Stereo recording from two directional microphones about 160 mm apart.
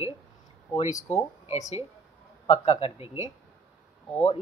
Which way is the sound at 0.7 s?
50° left (ahead or behind).